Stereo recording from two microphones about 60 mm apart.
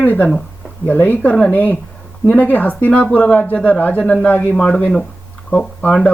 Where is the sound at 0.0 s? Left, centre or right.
Left.